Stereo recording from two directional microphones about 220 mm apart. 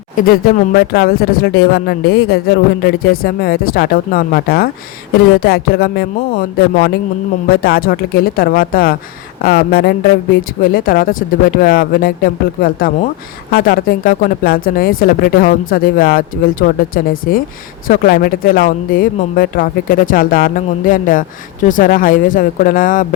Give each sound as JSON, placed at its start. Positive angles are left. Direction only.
{"t": 0.2, "sound": "speech", "side_deg": 40}